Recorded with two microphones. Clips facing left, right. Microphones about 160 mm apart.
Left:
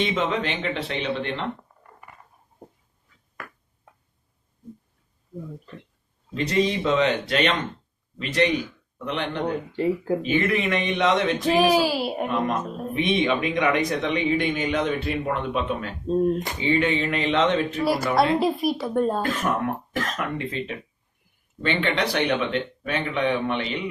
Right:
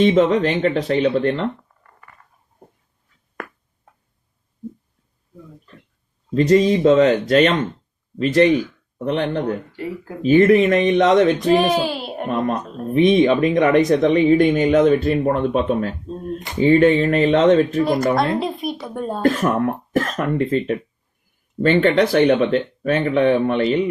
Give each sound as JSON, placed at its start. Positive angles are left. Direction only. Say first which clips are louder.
{"t": 0.0, "sound": "speech", "louder": "right 10 dB", "side_deg": -40}
{"t": 6.3, "sound": "speech", "louder": "right 9 dB", "side_deg": -40}
{"t": 11.5, "sound": "speech", "louder": "right 2 dB", "side_deg": 0}
{"t": 12.9, "sound": "speech", "louder": "right 9 dB", "side_deg": -40}
{"t": 16.0, "sound": "speech", "louder": "left 7 dB", "side_deg": 40}
{"t": 16.6, "sound": "speech", "louder": "right 13 dB", "side_deg": -45}
{"t": 18.3, "sound": "speech", "louder": "left 1 dB", "side_deg": 0}
{"t": 19.4, "sound": "speech", "louder": "right 6 dB", "side_deg": -40}